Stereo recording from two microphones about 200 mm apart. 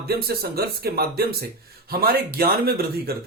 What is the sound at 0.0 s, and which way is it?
Speech, 50° right (ahead or behind).